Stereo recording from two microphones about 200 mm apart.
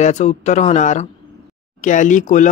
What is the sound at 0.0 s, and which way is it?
Speech, 35° left (ahead or behind).